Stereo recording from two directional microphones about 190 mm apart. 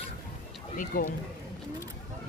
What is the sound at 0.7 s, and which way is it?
Speech, 45° left (ahead or behind).